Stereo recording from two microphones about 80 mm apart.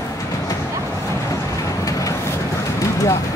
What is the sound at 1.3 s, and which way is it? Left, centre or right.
Vehicle, left.